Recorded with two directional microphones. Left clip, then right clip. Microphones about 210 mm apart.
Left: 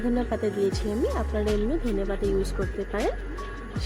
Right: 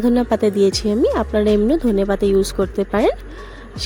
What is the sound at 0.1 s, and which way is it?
A woman's voice, 45° right (ahead or behind).